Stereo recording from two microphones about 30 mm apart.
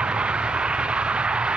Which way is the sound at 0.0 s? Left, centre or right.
Right.